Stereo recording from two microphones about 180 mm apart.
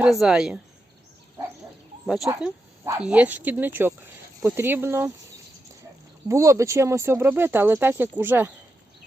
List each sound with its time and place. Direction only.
0.0 s speech: centre (ahead or behind)
2.2 s speech: 15° right (ahead or behind)
6.2 s speech: 15° right (ahead or behind)